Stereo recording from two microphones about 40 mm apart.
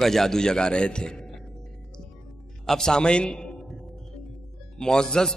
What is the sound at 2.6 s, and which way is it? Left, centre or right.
Speech, centre.